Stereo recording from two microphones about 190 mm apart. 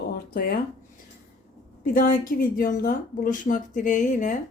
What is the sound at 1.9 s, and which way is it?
Speech, 45° left (ahead or behind).